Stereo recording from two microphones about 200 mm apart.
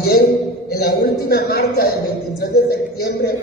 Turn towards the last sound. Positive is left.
turn(degrees=50)  # may be behind; listen again after turning